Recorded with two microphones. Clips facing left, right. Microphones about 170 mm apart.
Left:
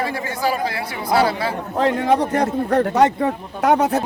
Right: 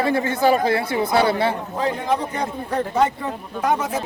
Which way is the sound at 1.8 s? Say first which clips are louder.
Left 7 dB; 70° left (ahead or behind).